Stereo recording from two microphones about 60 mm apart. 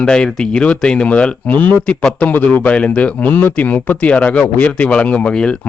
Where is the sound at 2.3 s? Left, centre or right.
Left.